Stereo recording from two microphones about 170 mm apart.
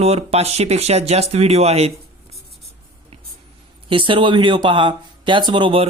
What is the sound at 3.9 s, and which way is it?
Speech, 30° right (ahead or behind).